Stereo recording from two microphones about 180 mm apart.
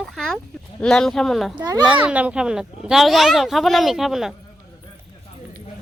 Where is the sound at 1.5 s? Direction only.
20° right (ahead or behind).